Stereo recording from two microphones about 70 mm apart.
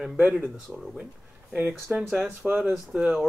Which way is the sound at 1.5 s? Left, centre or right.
Right.